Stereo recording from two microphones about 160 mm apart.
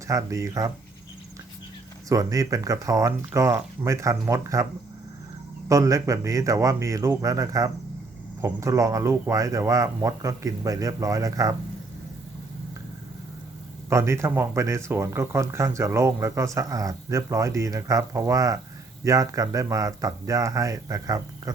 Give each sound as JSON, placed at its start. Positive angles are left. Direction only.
{"t": 0.1, "sound": "speech", "side_deg": -20}
{"t": 2.0, "sound": "speech", "side_deg": -20}
{"t": 5.6, "sound": "speech", "side_deg": -20}
{"t": 13.9, "sound": "speech", "side_deg": -15}